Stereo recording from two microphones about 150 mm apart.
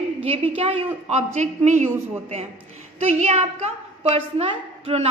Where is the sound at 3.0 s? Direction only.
50° right (ahead or behind).